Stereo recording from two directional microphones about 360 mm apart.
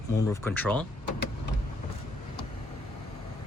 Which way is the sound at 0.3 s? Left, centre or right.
Centre.